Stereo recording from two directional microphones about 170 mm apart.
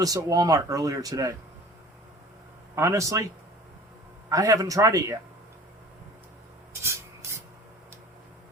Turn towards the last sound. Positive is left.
turn(degrees=-15)  # may be behind; listen again after turning